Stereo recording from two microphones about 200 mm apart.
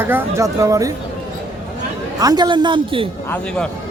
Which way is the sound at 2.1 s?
20° right (ahead or behind).